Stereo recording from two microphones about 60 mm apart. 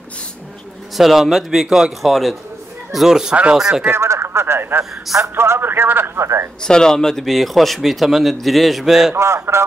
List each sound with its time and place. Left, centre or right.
0.9 s a man's voice: centre
3.9 s speech: right
6.2 s speech: right
6.6 s speech: centre
9.1 s speech: right